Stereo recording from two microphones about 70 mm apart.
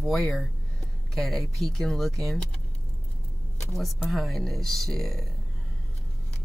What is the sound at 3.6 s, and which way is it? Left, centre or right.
Speech, centre.